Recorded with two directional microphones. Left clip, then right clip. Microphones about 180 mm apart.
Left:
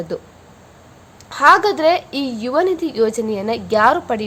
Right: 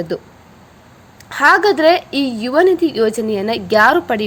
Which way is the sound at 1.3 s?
15° right (ahead or behind).